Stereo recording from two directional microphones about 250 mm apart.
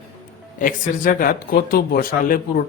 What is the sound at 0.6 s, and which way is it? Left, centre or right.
Speech, left.